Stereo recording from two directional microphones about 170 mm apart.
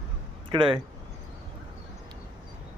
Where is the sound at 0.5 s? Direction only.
30° right (ahead or behind).